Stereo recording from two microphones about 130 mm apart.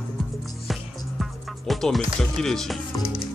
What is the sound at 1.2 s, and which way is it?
Speech, centre (ahead or behind).